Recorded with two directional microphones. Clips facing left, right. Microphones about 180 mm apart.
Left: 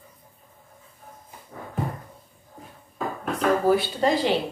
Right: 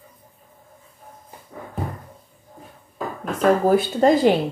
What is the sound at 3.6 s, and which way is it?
Speech, 45° right (ahead or behind).